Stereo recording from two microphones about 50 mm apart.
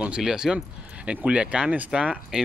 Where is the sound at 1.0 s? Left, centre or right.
Right.